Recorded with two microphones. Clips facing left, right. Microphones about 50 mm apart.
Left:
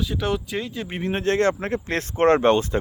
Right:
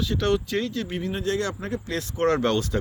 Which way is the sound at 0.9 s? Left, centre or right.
Left.